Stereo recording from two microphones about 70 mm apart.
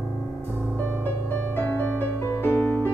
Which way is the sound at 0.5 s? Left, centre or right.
Left.